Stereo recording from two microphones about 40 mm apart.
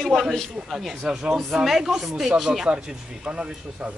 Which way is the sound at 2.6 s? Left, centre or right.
Right.